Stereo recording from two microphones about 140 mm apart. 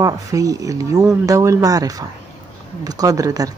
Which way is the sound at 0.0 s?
25° right (ahead or behind).